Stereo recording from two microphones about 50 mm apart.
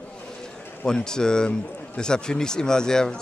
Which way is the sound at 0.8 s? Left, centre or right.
Centre.